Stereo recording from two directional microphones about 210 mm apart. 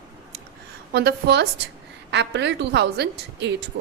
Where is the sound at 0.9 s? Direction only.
50° right (ahead or behind).